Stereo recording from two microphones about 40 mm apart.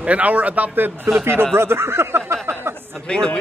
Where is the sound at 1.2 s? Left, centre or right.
Right.